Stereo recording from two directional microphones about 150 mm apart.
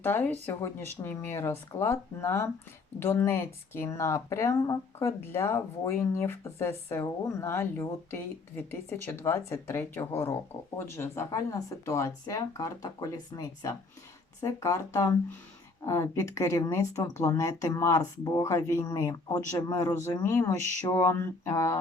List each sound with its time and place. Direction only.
0.0 s speech: 15° left (ahead or behind)